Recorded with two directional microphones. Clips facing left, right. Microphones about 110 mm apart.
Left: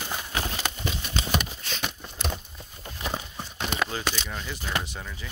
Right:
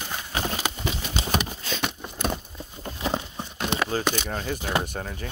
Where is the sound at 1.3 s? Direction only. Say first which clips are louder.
Right 3 dB; 50° right (ahead or behind).